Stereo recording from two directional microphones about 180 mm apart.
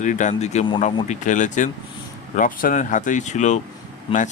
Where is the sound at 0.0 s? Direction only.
45° left (ahead or behind).